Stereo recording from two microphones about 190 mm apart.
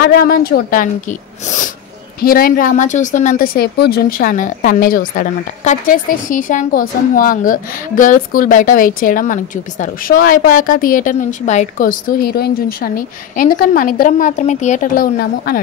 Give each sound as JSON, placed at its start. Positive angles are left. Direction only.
{"t": 0.0, "sound": "a woman's voice", "side_deg": 50}
{"t": 2.2, "sound": "a woman's voice", "side_deg": 50}
{"t": 3.5, "sound": "a woman's voice", "side_deg": 55}
{"t": 12.2, "sound": "a woman's voice", "side_deg": 55}